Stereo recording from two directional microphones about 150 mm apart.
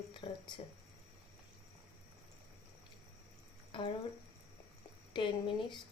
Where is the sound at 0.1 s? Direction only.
30° left (ahead or behind).